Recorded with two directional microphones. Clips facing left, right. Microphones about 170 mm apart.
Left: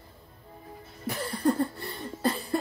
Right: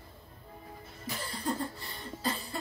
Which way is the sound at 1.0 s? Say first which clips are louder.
Left 9 dB; 60° left (ahead or behind).